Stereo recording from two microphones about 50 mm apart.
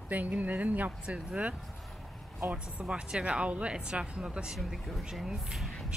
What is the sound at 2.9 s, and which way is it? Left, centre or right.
Speech, centre.